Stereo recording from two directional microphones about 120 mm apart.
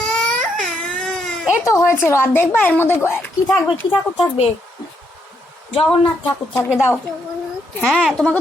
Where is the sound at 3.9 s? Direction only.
50° left (ahead or behind).